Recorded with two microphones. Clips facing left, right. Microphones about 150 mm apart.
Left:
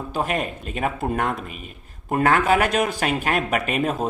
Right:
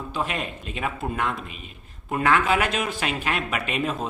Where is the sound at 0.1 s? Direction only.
45° left (ahead or behind).